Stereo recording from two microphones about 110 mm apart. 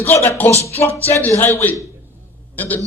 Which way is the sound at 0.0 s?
20° left (ahead or behind).